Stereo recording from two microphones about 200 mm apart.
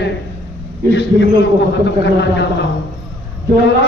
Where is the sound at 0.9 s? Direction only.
60° left (ahead or behind).